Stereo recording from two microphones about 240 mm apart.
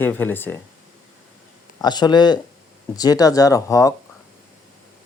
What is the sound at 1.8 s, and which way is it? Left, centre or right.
Speech, centre.